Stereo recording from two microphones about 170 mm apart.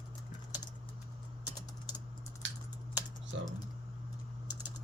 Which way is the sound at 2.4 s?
90° right.